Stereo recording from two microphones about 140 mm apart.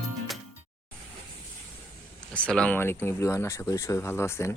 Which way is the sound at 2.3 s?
10° left (ahead or behind).